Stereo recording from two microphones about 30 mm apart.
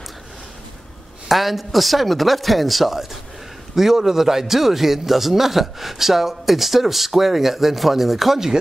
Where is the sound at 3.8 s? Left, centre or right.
Centre.